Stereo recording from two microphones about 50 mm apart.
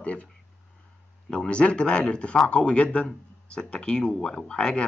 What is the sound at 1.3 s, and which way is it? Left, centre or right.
Speech, centre.